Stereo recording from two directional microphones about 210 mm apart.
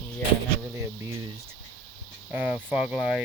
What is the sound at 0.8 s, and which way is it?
Speech, 15° right (ahead or behind).